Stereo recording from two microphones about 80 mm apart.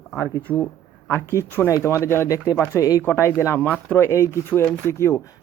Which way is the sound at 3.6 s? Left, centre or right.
Centre.